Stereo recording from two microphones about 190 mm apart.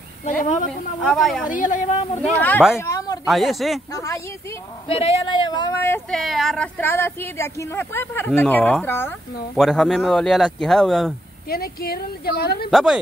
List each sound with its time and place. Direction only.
0.2 s a woman's voice: 40° left (ahead or behind)
1.0 s speech: centre (ahead or behind)
1.5 s a woman's voice: 40° left (ahead or behind)
2.2 s speech: 10° left (ahead or behind)
2.8 s a sound: 15° left (ahead or behind)
3.3 s speech: centre (ahead or behind)
3.9 s speech: 15° left (ahead or behind)
4.8 s speech: 30° left (ahead or behind); by 11.1 s 5° left (ahead or behind)
11.4 s a woman's voice: 55° left (ahead or behind)
12.7 s speech: centre (ahead or behind)